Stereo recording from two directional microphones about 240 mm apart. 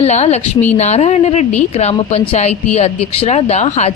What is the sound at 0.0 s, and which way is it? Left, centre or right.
A woman's voice, left.